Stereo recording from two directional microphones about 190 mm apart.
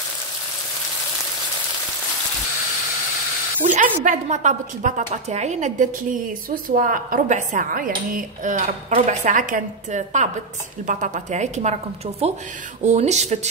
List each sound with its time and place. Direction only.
3.6 s a woman's voice: 40° right (ahead or behind)